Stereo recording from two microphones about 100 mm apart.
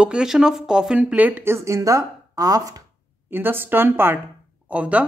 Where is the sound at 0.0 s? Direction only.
10° right (ahead or behind); by 2.8 s 35° right (ahead or behind).